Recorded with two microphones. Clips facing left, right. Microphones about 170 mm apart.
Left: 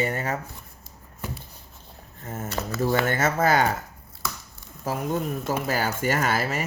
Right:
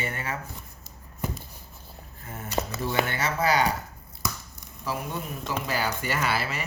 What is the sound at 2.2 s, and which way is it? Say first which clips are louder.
Speech: even; 40° left (ahead or behind).